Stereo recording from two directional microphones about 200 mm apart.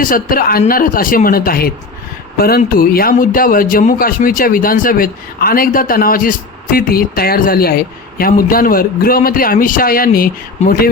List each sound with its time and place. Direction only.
0.0 s a man's voice: 45° left (ahead or behind)